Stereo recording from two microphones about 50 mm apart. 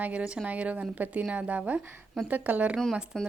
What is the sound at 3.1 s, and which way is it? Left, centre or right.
Speech, centre.